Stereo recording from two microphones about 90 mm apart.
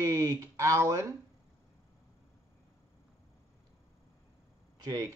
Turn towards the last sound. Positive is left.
turn(degrees=-45)  # may be behind; listen again after turning